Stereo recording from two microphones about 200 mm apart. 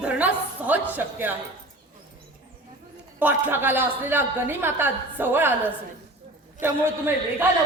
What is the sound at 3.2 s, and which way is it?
A woman's voice, 10° right (ahead or behind).